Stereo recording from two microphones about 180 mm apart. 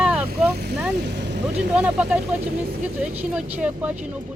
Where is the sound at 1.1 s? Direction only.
75° right (ahead or behind).